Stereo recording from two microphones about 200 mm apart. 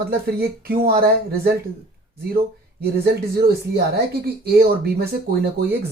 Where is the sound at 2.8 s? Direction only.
50° right (ahead or behind).